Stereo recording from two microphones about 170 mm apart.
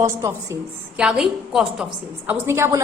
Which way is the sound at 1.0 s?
5° right (ahead or behind).